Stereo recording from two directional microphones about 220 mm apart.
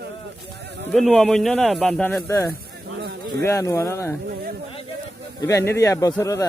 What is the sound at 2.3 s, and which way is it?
Speech, 15° left (ahead or behind).